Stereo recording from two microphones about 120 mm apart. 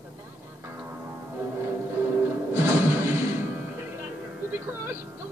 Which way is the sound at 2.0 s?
25° right (ahead or behind).